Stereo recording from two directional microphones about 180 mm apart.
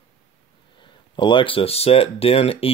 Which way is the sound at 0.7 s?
25° left (ahead or behind).